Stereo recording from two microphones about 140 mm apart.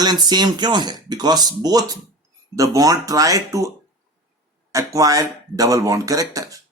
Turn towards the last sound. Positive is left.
turn(degrees=-25)  # may be behind; listen again after turning